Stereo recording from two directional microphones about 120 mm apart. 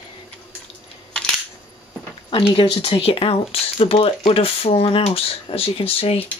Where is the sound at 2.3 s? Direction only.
50° left (ahead or behind).